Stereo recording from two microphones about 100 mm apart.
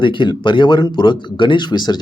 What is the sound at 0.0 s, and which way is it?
Speech, 55° left (ahead or behind).